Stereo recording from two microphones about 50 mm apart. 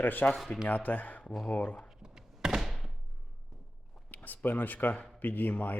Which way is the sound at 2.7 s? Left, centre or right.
Centre.